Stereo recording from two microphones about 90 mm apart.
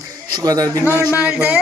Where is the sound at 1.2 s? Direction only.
15° right (ahead or behind).